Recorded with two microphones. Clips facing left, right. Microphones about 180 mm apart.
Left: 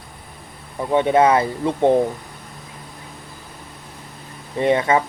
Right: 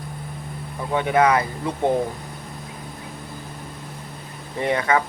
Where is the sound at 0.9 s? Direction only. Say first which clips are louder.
Left 3 dB; 25° left (ahead or behind).